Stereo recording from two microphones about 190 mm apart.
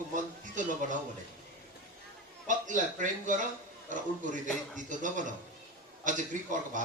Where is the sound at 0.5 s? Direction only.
40° right (ahead or behind).